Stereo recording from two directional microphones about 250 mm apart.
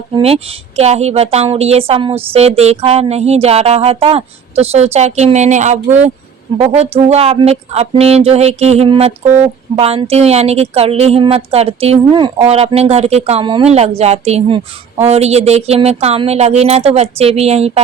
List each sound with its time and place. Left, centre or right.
0.2 s speech: right